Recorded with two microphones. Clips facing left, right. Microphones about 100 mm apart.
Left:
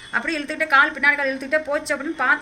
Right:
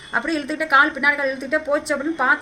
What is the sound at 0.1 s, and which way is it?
Speech, 15° right (ahead or behind).